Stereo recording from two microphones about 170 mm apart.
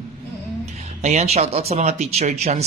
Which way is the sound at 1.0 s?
40° right (ahead or behind).